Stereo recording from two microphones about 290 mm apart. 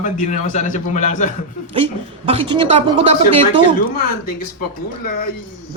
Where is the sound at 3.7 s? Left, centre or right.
Left.